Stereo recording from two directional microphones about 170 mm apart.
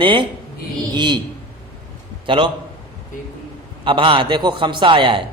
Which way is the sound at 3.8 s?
30° right (ahead or behind).